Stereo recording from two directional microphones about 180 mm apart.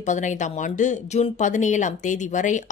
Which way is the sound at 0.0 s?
45° left (ahead or behind).